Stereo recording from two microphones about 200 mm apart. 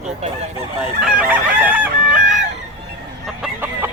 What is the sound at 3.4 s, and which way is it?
Chicken, 10° right (ahead or behind).